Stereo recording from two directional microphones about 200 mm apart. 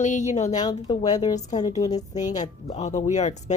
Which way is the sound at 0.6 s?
20° left (ahead or behind).